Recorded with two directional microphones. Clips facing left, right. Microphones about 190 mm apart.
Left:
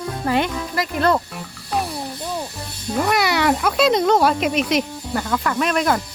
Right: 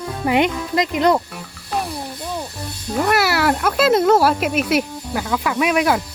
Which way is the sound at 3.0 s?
5° right (ahead or behind).